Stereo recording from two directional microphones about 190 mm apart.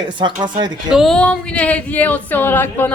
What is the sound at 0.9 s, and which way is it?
Speech, centre (ahead or behind).